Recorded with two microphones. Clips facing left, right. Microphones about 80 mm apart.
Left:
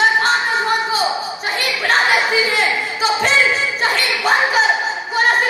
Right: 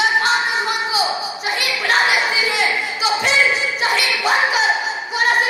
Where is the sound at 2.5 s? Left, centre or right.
Left.